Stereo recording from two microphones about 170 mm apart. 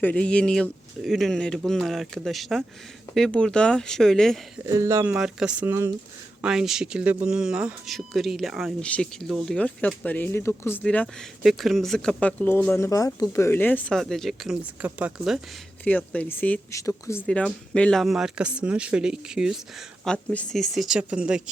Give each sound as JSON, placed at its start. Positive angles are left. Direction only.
{"t": 0.0, "sound": "speech", "side_deg": 5}
{"t": 4.6, "sound": "speech", "side_deg": -15}
{"t": 5.1, "sound": "speech", "side_deg": -5}
{"t": 15.8, "sound": "speech", "side_deg": 10}
{"t": 17.2, "sound": "speech", "side_deg": 5}